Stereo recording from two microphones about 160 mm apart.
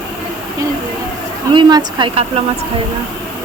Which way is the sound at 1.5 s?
30° right (ahead or behind).